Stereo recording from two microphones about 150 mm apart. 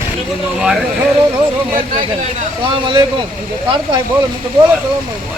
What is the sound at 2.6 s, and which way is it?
Speech, 35° right (ahead or behind).